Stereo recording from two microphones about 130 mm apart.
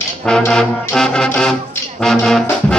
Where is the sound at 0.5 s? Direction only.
5° left (ahead or behind).